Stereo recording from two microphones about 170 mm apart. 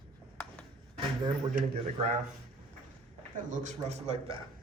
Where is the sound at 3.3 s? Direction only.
45° right (ahead or behind).